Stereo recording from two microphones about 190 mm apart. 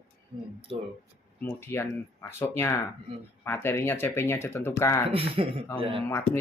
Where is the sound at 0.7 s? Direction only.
30° right (ahead or behind).